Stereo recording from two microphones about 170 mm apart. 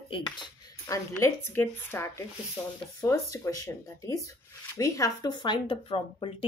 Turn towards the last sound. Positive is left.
turn(degrees=30)  # may be behind; listen again after turning